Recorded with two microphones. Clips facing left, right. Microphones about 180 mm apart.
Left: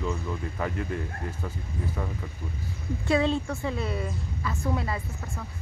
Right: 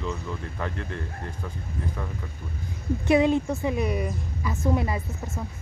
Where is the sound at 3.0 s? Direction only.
20° right (ahead or behind).